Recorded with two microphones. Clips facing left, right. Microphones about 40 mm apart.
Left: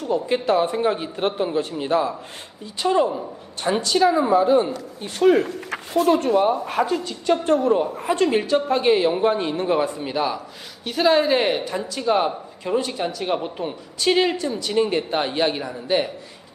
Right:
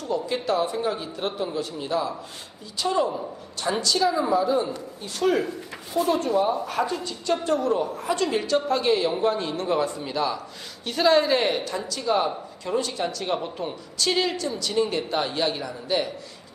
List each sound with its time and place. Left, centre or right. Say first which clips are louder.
0.0 s a man's voice: left 5 dB; left
5.4 s speech: left 4 dB; left
6.8 s a woman's voice: left 4 dB; centre
7.4 s speech: left 4 dB; left
10.8 s speech: left 2 dB; centre; by 16.0 s left